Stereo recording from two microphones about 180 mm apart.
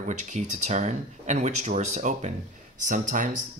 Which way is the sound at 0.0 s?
40° right (ahead or behind).